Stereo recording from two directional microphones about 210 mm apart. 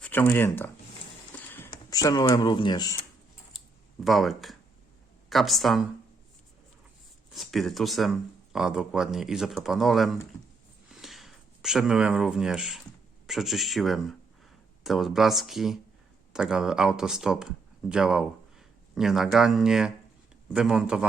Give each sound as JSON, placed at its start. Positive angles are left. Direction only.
{"t": 0.0, "sound": "speech", "side_deg": 10}
{"t": 1.3, "sound": "a sound", "side_deg": 10}
{"t": 4.0, "sound": "speech", "side_deg": 0}
{"t": 7.3, "sound": "speech", "side_deg": 0}